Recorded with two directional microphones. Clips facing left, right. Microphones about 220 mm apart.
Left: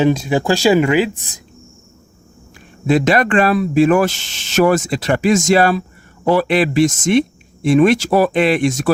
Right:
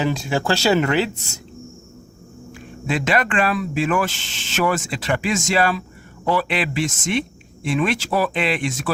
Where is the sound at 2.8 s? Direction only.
40° left (ahead or behind).